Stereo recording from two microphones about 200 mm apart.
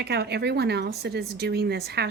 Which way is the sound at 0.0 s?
55° right (ahead or behind).